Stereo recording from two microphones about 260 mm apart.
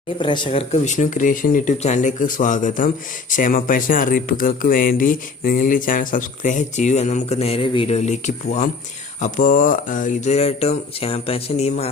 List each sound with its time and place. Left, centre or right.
0.2 s speech: centre